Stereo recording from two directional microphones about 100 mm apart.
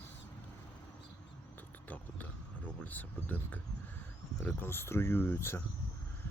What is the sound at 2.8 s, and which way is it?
Speech, 15° left (ahead or behind).